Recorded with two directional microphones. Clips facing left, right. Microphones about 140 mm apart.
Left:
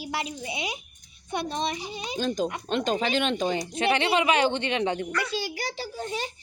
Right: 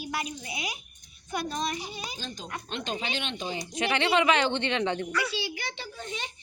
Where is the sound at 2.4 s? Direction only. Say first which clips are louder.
Left 10 dB; 50° left (ahead or behind).